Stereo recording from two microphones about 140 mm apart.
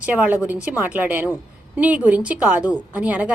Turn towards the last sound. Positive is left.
turn(degrees=-10)  # may be behind; listen again after turning